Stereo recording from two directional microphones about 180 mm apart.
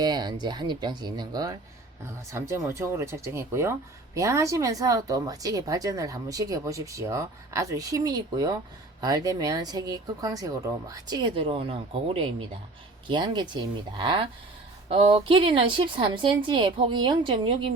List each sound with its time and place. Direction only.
0.0 s speech: 25° right (ahead or behind)